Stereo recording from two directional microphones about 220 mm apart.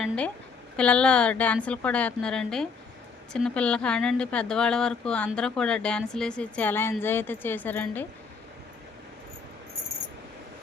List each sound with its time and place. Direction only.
0.8 s speech: 5° left (ahead or behind)